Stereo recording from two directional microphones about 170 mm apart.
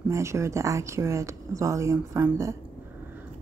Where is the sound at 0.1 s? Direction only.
15° right (ahead or behind).